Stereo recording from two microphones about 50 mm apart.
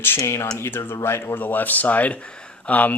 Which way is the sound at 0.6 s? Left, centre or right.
Left.